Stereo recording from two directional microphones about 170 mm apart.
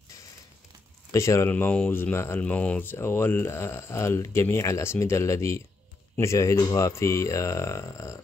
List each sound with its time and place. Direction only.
1.1 s speech: 15° left (ahead or behind)